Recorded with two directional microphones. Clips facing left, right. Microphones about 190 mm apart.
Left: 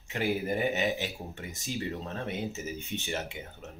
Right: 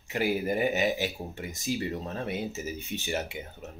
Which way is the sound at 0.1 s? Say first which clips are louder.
Right 2 dB; 10° right (ahead or behind).